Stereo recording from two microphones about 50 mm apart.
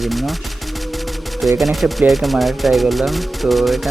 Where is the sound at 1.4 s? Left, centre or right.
Centre.